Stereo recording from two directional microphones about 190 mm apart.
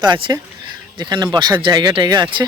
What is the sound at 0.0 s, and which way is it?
Speech, 25° right (ahead or behind).